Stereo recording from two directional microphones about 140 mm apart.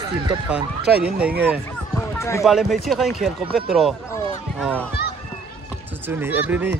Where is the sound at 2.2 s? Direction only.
20° left (ahead or behind).